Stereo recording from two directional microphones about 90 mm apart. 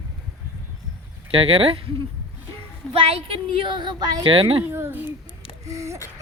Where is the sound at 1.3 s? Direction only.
90° right.